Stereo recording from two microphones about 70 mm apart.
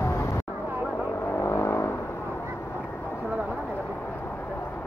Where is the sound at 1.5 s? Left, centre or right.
Left.